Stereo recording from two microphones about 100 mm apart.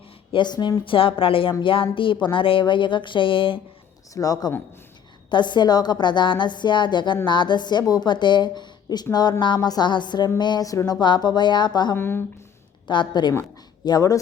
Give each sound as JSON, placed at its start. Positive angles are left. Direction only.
{"t": 0.3, "sound": "a woman's voice", "side_deg": 50}
{"t": 0.9, "sound": "speech", "side_deg": 65}
{"t": 4.1, "sound": "music", "side_deg": 35}
{"t": 5.3, "sound": "a woman's voice", "side_deg": 50}
{"t": 10.2, "sound": "music", "side_deg": 45}
{"t": 11.0, "sound": "a woman's voice", "side_deg": 45}
{"t": 11.9, "sound": "speech", "side_deg": 20}
{"t": 12.9, "sound": "a woman's voice", "side_deg": 50}
{"t": 13.8, "sound": "music", "side_deg": 40}